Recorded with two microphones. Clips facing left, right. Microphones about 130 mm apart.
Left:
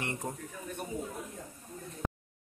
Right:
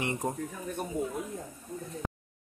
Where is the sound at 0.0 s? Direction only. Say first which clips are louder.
Right 5 dB; 20° right (ahead or behind).